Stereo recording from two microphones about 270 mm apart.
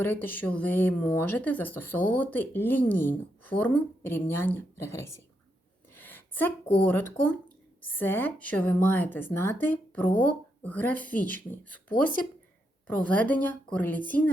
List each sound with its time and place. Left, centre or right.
0.0 s speech: centre
5.9 s a sound: centre
6.7 s speech: centre